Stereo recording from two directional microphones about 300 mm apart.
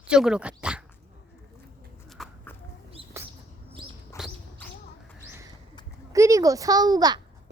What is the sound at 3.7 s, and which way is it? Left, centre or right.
Bird, centre.